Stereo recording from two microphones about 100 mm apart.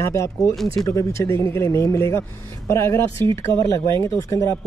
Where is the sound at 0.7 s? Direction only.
30° left (ahead or behind).